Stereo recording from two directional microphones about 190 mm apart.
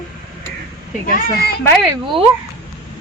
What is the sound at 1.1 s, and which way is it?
Speech, 50° left (ahead or behind).